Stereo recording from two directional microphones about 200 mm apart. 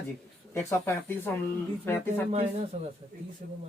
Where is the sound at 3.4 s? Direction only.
45° right (ahead or behind).